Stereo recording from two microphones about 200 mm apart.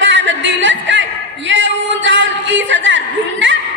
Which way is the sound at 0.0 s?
65° right (ahead or behind).